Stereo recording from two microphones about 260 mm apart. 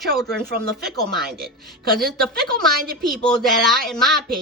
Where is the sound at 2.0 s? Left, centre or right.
Centre.